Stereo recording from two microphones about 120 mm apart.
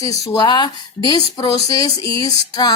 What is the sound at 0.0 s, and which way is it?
A woman's voice, 30° left (ahead or behind).